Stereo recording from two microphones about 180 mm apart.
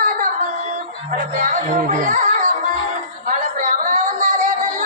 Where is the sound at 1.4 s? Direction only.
50° right (ahead or behind).